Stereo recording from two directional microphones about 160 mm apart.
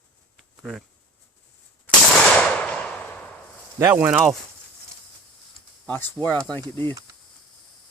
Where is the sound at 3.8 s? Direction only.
10° right (ahead or behind).